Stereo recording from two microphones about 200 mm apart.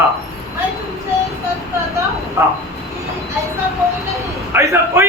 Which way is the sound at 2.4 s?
15° right (ahead or behind).